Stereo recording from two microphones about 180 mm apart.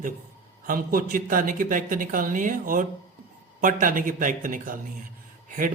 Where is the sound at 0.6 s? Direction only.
50° right (ahead or behind).